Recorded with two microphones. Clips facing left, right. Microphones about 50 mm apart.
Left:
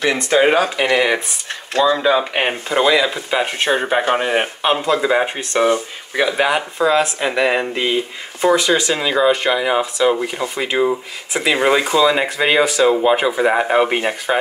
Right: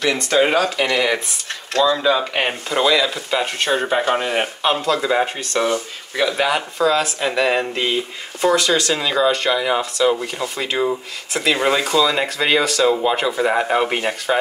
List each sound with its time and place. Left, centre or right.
0.0 s speech: centre